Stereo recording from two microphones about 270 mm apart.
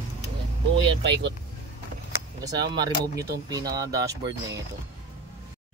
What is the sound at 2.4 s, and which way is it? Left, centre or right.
Speech, centre.